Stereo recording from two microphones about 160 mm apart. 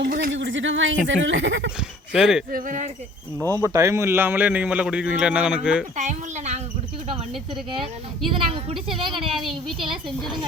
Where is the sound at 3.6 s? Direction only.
20° right (ahead or behind).